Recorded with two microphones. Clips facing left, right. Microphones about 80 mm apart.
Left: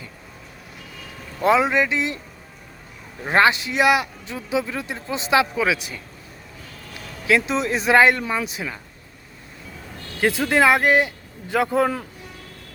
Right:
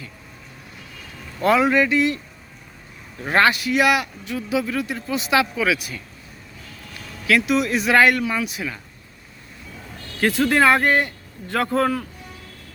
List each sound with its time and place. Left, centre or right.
1.4 s speech: left
3.2 s speech: left
7.3 s speech: left
10.2 s speech: centre